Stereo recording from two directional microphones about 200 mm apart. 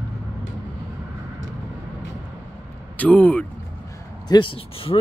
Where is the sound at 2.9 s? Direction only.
5° left (ahead or behind).